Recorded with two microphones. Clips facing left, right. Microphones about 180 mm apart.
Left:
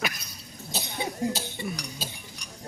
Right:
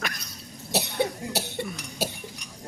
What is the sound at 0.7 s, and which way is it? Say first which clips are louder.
Cough: right 7 dB; 70° right (ahead or behind).